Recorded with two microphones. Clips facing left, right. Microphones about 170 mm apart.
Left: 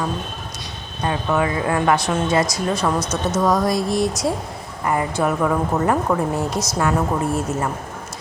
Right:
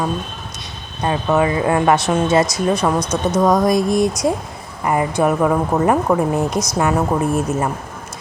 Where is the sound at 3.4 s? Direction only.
20° right (ahead or behind).